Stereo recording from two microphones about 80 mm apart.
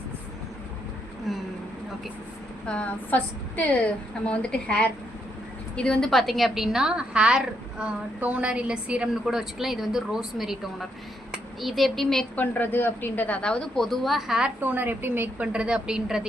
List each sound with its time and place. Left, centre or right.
2.6 s a woman's voice: centre
12.4 s a woman's voice: left; by 14.5 s centre
14.6 s a woman's voice: right
15.5 s a woman's voice: centre